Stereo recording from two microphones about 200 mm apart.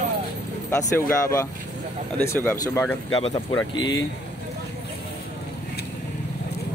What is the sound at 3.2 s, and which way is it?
Speech, 20° left (ahead or behind).